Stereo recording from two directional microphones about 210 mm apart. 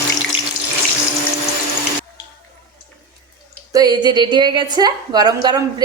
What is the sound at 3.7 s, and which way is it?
A woman's voice, 20° right (ahead or behind).